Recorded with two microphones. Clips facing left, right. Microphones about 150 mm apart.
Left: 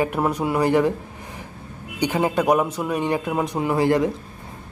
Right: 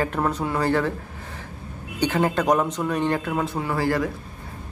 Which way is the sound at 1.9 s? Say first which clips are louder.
Left 1 dB; 15° left (ahead or behind).